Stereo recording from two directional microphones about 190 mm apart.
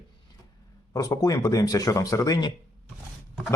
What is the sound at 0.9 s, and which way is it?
Speech, 20° left (ahead or behind).